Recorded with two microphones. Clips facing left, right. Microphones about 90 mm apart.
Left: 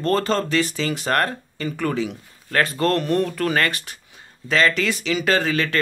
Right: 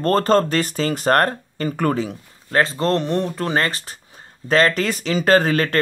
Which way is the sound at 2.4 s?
25° right (ahead or behind).